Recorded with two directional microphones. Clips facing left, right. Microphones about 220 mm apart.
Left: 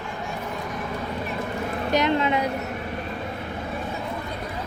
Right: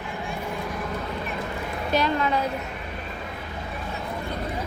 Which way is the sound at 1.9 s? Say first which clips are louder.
Left 2 dB; 20° left (ahead or behind).